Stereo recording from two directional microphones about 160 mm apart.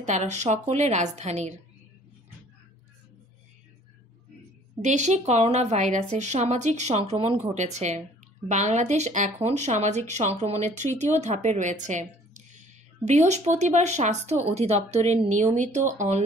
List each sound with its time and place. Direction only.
0.0 s a woman's voice: 45° right (ahead or behind)
4.8 s a woman's voice: 45° right (ahead or behind)